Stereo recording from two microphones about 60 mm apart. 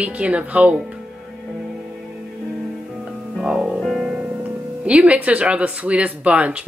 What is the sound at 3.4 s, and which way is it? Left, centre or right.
Speech, centre.